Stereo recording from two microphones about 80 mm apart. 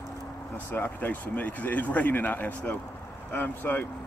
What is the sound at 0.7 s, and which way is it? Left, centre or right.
Speech, left.